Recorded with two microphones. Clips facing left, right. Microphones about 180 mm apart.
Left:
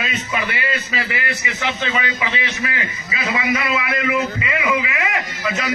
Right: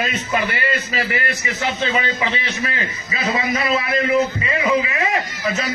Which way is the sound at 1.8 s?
30° right (ahead or behind).